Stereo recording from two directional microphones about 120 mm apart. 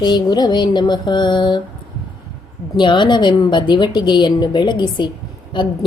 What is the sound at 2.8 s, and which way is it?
Speech, 40° left (ahead or behind).